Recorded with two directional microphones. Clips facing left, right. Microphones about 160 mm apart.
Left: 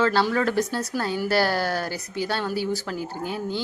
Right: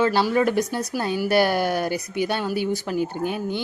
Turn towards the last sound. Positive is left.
turn(degrees=-20)  # may be behind; listen again after turning